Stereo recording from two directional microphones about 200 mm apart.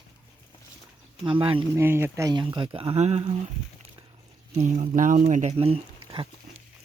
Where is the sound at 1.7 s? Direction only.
10° right (ahead or behind); by 3.3 s 35° right (ahead or behind).